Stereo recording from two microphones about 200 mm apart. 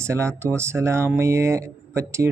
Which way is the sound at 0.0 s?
15° right (ahead or behind).